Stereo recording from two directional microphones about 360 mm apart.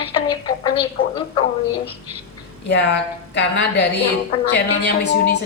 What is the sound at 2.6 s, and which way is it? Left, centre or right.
A woman's voice, left.